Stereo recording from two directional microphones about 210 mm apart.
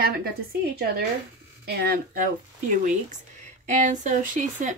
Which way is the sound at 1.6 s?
50° right (ahead or behind).